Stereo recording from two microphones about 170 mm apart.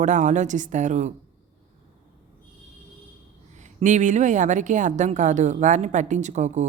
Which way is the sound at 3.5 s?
45° right (ahead or behind).